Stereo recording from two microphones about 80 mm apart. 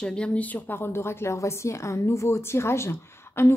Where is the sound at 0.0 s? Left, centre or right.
Centre.